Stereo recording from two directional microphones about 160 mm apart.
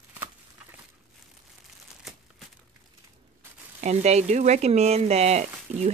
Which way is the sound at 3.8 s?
45° right (ahead or behind).